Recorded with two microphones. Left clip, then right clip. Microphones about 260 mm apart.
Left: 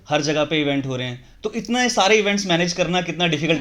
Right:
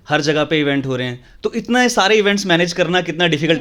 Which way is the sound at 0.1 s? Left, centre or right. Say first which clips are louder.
Right 4 dB; right.